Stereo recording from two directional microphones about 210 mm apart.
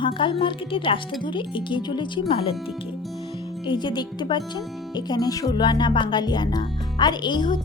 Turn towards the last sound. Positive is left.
turn(degrees=20)  # may be behind; listen again after turning